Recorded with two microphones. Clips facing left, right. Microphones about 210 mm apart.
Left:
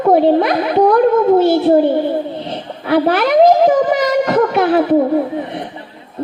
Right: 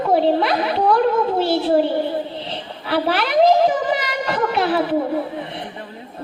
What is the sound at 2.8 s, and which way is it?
Speech, 50° left (ahead or behind).